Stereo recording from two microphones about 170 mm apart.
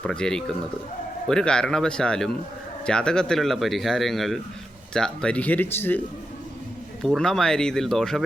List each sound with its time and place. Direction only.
0.0 s speech: 5° left (ahead or behind)
7.0 s speech: 5° left (ahead or behind)